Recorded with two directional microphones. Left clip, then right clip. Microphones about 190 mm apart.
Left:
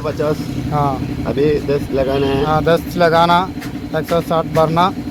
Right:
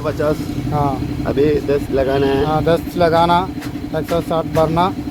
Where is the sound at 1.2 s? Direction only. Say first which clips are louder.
Even; 25° left (ahead or behind).